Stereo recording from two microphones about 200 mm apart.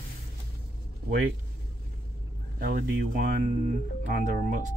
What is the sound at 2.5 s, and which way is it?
Speech, 55° right (ahead or behind).